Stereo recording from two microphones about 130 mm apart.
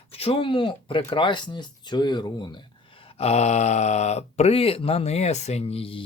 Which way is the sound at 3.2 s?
55° left (ahead or behind).